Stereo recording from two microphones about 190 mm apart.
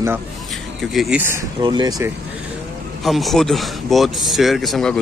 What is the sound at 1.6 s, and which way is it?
Speech, 25° right (ahead or behind).